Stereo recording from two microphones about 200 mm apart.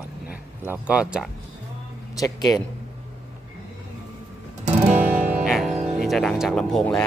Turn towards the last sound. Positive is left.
turn(degrees=5)  # may be behind; listen again after turning